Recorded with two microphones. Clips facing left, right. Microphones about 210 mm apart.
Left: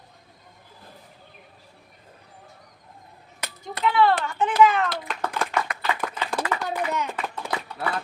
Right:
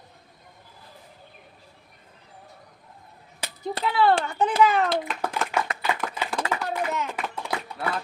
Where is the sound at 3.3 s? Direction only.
30° right (ahead or behind).